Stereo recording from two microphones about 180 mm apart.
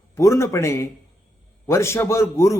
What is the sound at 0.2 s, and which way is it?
Speech, 15° left (ahead or behind).